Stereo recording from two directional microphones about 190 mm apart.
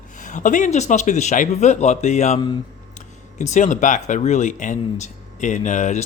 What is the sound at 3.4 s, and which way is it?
Speech, 40° left (ahead or behind).